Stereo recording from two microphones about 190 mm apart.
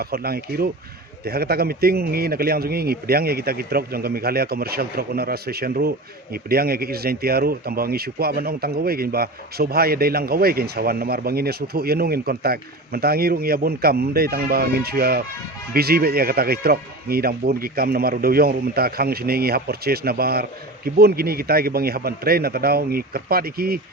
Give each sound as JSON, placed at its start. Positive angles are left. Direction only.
{"t": 0.0, "sound": "speech", "side_deg": -55}